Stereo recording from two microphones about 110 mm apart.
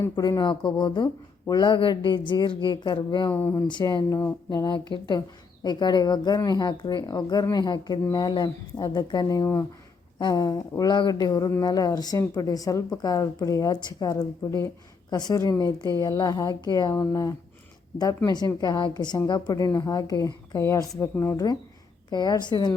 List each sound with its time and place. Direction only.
0.0 s a woman's voice: 35° left (ahead or behind)
3.3 s speech: 15° left (ahead or behind)
3.7 s a woman's voice: 45° left (ahead or behind)
16.9 s a woman's voice: 25° left (ahead or behind)
21.3 s a woman's voice: 35° left (ahead or behind)